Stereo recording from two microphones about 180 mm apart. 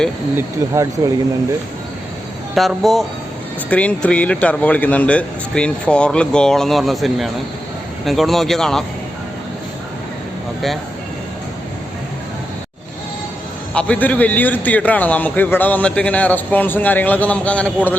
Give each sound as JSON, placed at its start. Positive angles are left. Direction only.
{"t": 0.3, "sound": "speech", "side_deg": -15}
{"t": 2.6, "sound": "speech", "side_deg": 0}
{"t": 13.7, "sound": "a man's voice", "side_deg": 5}